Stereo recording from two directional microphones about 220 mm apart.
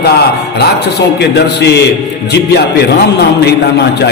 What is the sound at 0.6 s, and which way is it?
A man's voice, 50° left (ahead or behind).